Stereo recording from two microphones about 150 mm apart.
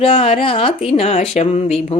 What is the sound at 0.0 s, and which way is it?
Speech, 40° left (ahead or behind).